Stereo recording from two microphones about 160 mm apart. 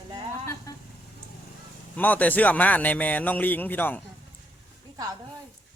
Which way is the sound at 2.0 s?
10° left (ahead or behind).